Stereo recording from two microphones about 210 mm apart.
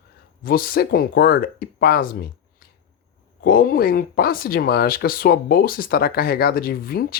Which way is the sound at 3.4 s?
40° left (ahead or behind).